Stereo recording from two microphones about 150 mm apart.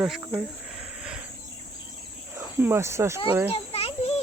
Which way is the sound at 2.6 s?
15° right (ahead or behind).